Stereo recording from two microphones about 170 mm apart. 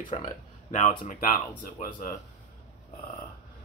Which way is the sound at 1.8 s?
60° left (ahead or behind).